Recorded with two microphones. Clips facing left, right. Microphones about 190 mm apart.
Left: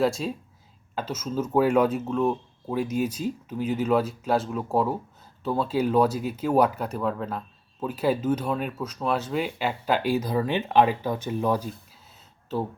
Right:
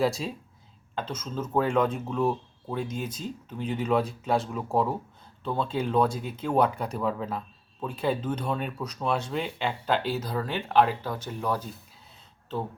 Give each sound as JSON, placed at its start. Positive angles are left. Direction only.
{"t": 0.0, "sound": "speech", "side_deg": 0}